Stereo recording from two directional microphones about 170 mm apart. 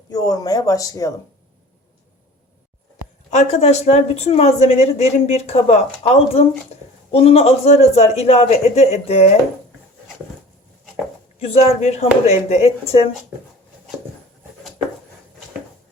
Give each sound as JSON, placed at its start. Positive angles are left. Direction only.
{"t": 0.1, "sound": "speech", "side_deg": 20}
{"t": 3.2, "sound": "speech", "side_deg": 40}
{"t": 11.3, "sound": "speech", "side_deg": 35}